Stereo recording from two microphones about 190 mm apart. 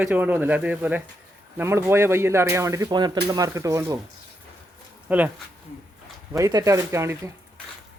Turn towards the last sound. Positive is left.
turn(degrees=-15)  # may be behind; listen again after turning